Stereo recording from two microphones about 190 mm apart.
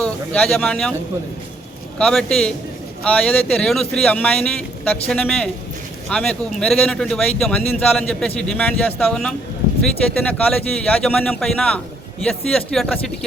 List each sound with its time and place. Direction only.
0.0 s a man's voice: 5° left (ahead or behind)
2.0 s a man's voice: 5° left (ahead or behind)